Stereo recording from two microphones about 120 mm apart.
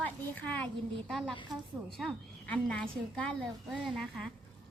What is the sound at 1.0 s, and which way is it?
Speech, centre (ahead or behind).